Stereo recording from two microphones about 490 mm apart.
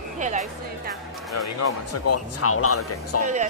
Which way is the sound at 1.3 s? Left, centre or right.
Left.